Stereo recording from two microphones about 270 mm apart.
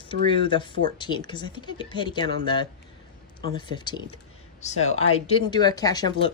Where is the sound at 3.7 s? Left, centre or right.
Centre.